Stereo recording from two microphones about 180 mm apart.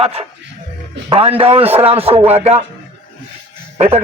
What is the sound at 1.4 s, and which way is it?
Music, 30° right (ahead or behind).